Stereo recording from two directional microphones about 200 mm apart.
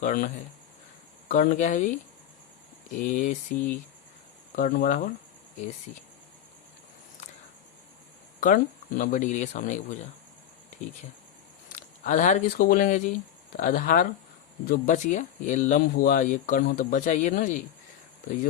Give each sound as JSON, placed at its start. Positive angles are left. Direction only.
{"t": 0.0, "sound": "speech", "side_deg": 45}
{"t": 1.3, "sound": "speech", "side_deg": 40}
{"t": 8.4, "sound": "speech", "side_deg": 40}
{"t": 12.0, "sound": "speech", "side_deg": 40}